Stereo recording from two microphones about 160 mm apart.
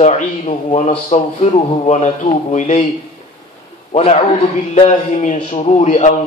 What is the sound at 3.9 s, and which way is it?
A man's voice, 40° left (ahead or behind).